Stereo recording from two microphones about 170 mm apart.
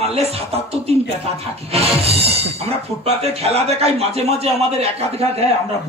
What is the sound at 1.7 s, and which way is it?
Speech, 35° right (ahead or behind).